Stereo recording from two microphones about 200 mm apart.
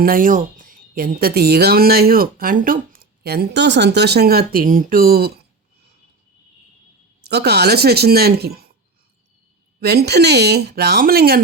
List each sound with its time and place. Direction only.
0.0 s speech: 45° right (ahead or behind)
7.3 s speech: 55° right (ahead or behind)
9.8 s speech: 55° right (ahead or behind)